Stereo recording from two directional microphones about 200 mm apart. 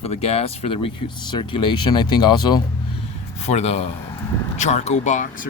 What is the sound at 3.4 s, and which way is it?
Speech, 35° left (ahead or behind).